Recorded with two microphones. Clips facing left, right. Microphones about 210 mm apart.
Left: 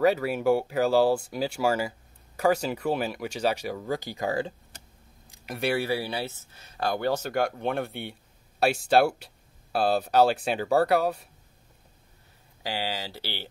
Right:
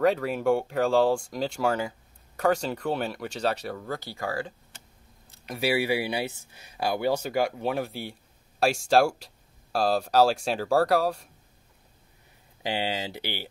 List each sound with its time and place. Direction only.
0.0 s speech: 5° left (ahead or behind); by 4.6 s 20° left (ahead or behind)
5.3 s speech: 5° left (ahead or behind)
12.6 s speech: 20° right (ahead or behind)